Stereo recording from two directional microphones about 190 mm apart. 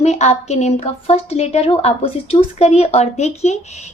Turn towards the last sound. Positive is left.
turn(degrees=35)  # may be behind; listen again after turning